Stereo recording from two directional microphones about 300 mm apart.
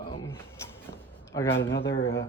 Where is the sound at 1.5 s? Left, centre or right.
Left.